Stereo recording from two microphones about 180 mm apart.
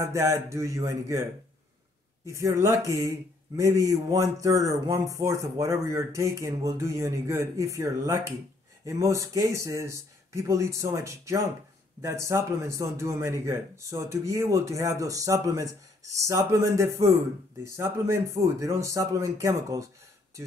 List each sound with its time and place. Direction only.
0.0 s speech: 15° right (ahead or behind)
2.2 s speech: 15° right (ahead or behind)